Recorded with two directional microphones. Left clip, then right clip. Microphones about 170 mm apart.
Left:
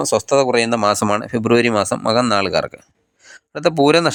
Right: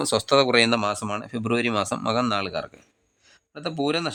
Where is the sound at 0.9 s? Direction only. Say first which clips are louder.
Left 11 dB; 40° left (ahead or behind).